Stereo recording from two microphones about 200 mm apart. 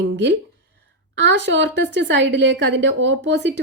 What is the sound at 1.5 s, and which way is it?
A woman's voice, 60° right (ahead or behind).